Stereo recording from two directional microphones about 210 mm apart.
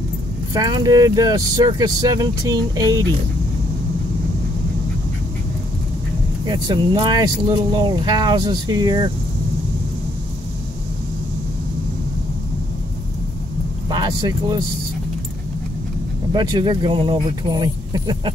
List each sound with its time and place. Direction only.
0.6 s speech: 20° right (ahead or behind)
6.4 s speech: 20° right (ahead or behind)
13.8 s speech: 20° right (ahead or behind)
16.3 s speech: 20° right (ahead or behind)